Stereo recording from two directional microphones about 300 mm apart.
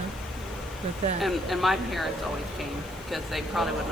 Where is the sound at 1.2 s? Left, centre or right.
Centre.